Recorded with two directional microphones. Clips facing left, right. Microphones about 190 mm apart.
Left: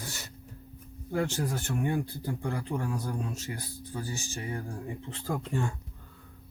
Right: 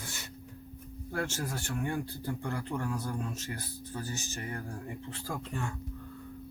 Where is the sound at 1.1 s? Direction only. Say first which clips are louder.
Left 5 dB; 15° left (ahead or behind).